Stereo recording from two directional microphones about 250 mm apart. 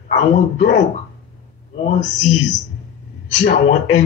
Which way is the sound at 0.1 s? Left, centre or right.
Left.